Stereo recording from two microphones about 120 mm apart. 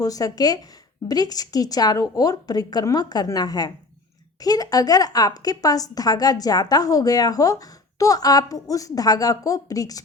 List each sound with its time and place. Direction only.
0.0 s a woman's voice: 30° left (ahead or behind)